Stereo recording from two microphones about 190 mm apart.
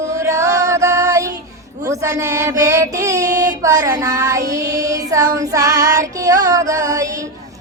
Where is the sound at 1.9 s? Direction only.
15° right (ahead or behind).